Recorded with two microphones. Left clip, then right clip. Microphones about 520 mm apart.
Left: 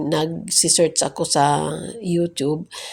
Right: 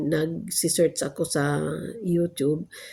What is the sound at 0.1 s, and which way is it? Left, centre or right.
Speech, right.